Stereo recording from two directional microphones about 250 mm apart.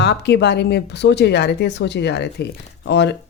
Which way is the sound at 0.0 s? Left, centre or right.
Left.